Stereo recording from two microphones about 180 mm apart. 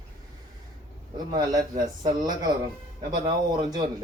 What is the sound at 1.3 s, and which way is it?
Speech, 20° right (ahead or behind).